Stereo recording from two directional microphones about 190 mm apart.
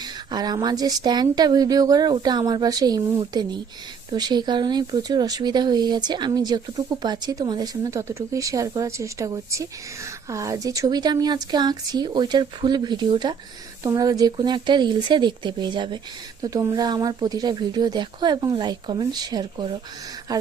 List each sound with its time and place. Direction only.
0.0 s speech: 20° right (ahead or behind)